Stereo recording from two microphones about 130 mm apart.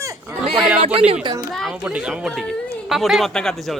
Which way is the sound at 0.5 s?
5° right (ahead or behind).